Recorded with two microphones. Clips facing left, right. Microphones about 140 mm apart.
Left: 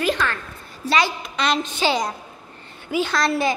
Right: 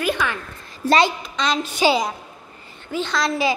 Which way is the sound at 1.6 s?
10° right (ahead or behind).